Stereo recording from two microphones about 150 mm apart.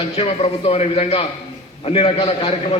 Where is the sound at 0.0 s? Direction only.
40° left (ahead or behind).